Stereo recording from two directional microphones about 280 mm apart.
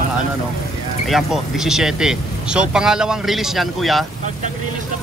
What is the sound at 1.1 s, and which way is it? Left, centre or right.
Speech, centre.